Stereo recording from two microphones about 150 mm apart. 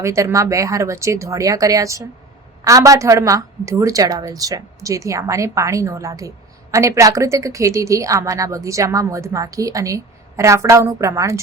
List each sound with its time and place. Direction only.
0.0 s a woman's voice: 20° right (ahead or behind)